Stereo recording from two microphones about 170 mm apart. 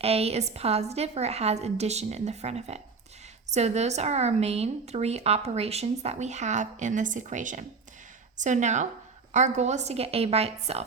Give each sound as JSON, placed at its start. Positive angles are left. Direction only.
{"t": 0.0, "sound": "a woman's voice", "side_deg": -35}